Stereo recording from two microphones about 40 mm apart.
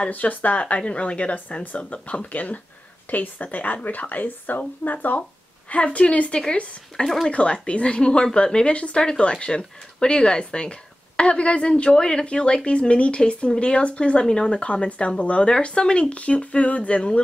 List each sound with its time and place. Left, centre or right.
0.1 s speech: left
5.7 s speech: left
14.6 s speech: left